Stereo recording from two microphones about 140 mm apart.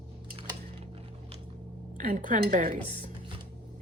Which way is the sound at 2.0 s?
70° right (ahead or behind).